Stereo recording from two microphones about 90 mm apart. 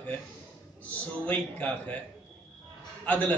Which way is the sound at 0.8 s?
15° left (ahead or behind).